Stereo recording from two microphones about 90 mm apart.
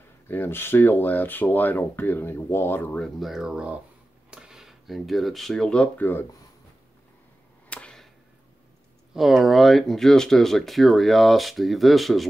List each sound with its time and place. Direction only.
0.3 s speech: 25° left (ahead or behind)
3.2 s speech: 5° right (ahead or behind)
7.7 s whip: 10° left (ahead or behind)
9.1 s speech: centre (ahead or behind)